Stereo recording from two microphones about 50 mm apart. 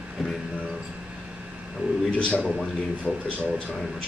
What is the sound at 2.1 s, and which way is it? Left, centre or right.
Speech, left.